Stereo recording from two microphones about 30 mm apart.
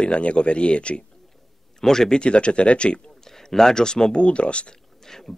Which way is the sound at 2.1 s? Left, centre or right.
Left.